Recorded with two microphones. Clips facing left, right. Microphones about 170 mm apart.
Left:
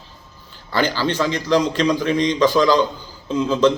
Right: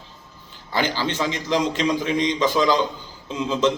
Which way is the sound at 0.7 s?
20° right (ahead or behind).